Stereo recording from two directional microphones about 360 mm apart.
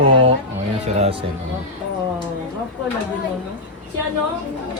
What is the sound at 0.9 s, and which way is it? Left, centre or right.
Speech, centre.